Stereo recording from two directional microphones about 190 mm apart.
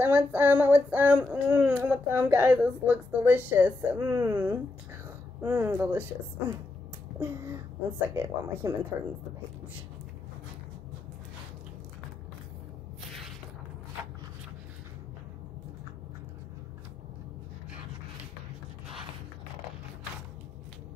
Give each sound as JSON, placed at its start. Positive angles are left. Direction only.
{"t": 0.0, "sound": "child singing", "side_deg": -10}
{"t": 8.1, "sound": "child singing", "side_deg": -10}